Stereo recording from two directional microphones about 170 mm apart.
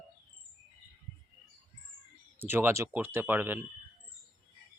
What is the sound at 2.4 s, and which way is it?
Speech, 15° right (ahead or behind).